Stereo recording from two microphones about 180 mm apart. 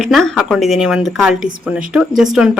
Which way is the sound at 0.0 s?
Centre (ahead or behind).